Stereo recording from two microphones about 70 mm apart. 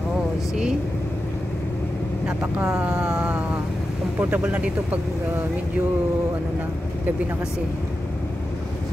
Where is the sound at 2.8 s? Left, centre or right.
Centre.